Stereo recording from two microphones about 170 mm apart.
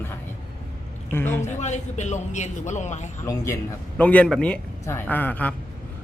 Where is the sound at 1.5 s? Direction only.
45° left (ahead or behind).